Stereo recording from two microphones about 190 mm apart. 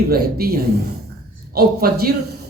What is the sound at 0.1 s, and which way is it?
A man's voice, 55° right (ahead or behind).